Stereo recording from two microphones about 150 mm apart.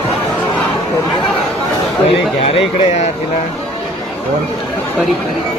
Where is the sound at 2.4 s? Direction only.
40° left (ahead or behind).